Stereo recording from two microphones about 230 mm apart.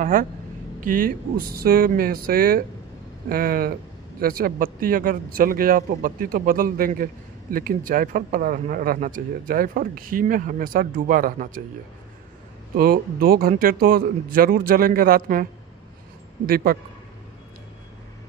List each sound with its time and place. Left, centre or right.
0.0 s speech: right
12.7 s speech: right
16.4 s speech: right